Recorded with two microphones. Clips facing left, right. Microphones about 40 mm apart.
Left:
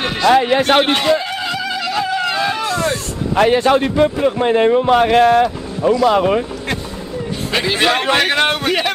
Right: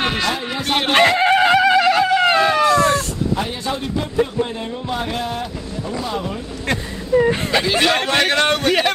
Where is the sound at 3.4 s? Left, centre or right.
Left.